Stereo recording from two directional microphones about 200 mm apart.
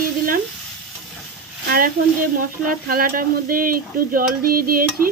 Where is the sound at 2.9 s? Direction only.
45° right (ahead or behind).